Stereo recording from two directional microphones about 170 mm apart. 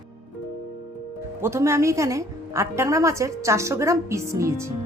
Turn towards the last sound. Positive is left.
turn(degrees=-15)  # may be behind; listen again after turning